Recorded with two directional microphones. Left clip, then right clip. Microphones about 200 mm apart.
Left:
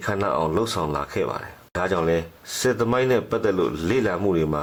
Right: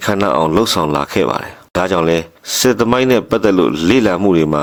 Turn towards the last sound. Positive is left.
turn(degrees=-40)  # may be behind; listen again after turning